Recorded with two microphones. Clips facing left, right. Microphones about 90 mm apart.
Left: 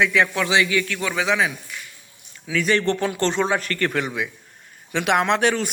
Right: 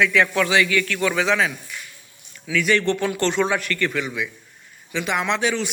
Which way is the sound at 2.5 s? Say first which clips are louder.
Even; 35° left (ahead or behind).